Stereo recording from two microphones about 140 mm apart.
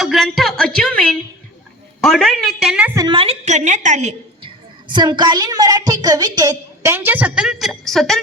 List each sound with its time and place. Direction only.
0.0 s a woman's voice: centre (ahead or behind)
3.1 s a woman's voice: 40° right (ahead or behind)
3.4 s a woman's voice: 60° right (ahead or behind)
4.4 s a woman's voice: 35° right (ahead or behind)
6.9 s a woman's voice: 15° right (ahead or behind); by 8.2 s centre (ahead or behind)